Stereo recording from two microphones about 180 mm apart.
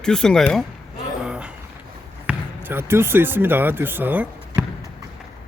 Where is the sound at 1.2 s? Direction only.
5° right (ahead or behind).